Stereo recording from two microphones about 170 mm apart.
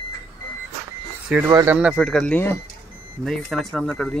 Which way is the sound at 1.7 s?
5° right (ahead or behind).